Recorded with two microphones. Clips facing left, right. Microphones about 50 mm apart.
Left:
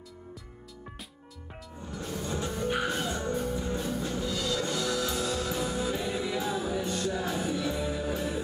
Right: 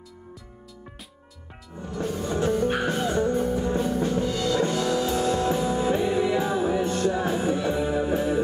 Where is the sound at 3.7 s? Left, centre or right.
Right.